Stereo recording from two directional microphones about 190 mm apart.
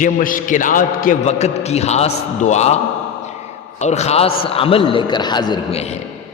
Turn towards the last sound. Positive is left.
turn(degrees=20)  # may be behind; listen again after turning